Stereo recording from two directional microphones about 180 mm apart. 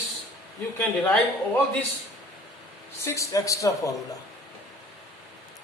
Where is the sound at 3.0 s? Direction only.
15° left (ahead or behind).